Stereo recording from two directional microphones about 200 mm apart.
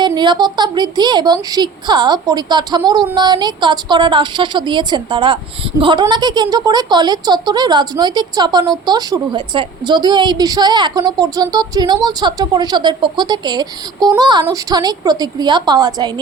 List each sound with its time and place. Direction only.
0.0 s a woman's voice: 20° right (ahead or behind)